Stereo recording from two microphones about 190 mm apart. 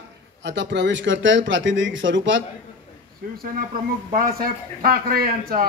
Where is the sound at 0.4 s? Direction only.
70° right (ahead or behind).